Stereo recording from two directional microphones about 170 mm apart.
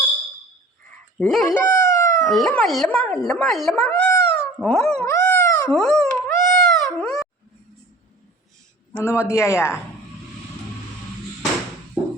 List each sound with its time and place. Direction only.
1.2 s speech: centre (ahead or behind)
1.5 s a sound: 15° left (ahead or behind)
2.3 s speech: centre (ahead or behind)
4.1 s dog: 5° left (ahead or behind)
5.7 s dog: 5° left (ahead or behind)
8.9 s a man's voice: 10° left (ahead or behind)